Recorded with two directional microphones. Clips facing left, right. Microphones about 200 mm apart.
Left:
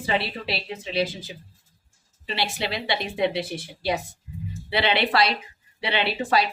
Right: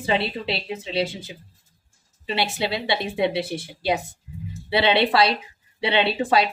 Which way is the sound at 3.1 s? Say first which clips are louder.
Even; 25° right (ahead or behind).